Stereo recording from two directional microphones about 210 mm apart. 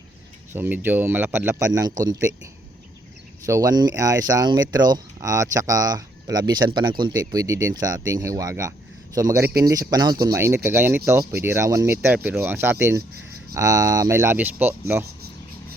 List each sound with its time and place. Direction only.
0.5 s speech: 10° right (ahead or behind)
3.4 s speech: 15° right (ahead or behind)